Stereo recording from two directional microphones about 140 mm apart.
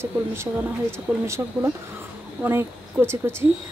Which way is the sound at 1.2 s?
20° right (ahead or behind).